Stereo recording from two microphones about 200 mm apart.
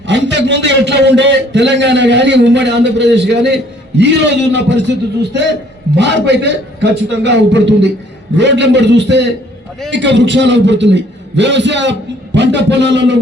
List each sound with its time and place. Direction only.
0.1 s a man's voice: 60° right (ahead or behind)